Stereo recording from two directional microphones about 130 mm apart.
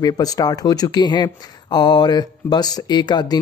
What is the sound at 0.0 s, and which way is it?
Speech, 30° left (ahead or behind).